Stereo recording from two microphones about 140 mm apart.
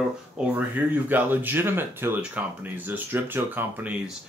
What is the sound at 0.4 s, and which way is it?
Speech, 10° right (ahead or behind).